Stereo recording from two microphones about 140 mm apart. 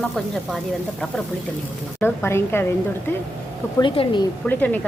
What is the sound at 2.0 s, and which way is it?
Speech, 15° left (ahead or behind).